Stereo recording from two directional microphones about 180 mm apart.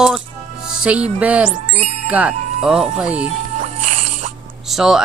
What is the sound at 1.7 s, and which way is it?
Speech, 35° right (ahead or behind).